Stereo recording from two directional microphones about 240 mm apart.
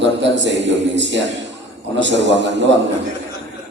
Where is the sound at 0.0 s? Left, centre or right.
Right.